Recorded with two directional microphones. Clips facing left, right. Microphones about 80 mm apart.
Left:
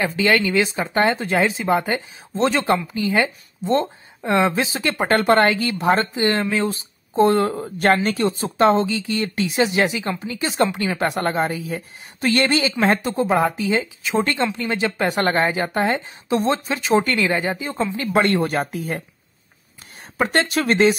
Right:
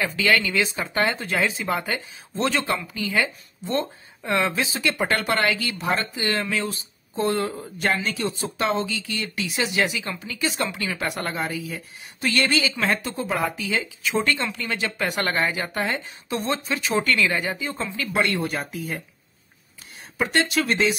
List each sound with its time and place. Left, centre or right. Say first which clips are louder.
0.0 s speech: left 3 dB; left
20.2 s speech: left 3 dB; left